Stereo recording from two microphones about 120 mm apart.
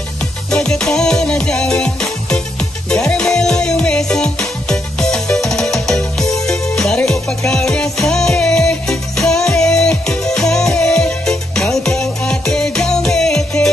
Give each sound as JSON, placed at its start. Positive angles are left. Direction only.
{"t": 0.5, "sound": "music", "side_deg": 5}